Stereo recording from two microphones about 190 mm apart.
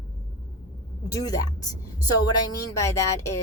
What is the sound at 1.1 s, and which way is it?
Speech, 20° left (ahead or behind).